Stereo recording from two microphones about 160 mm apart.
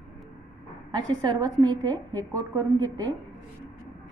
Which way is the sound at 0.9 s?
25° right (ahead or behind).